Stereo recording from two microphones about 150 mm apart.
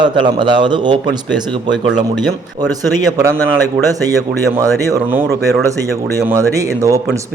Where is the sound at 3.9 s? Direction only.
25° right (ahead or behind).